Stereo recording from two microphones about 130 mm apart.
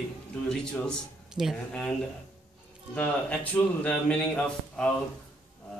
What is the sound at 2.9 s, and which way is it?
A man's voice, 10° left (ahead or behind).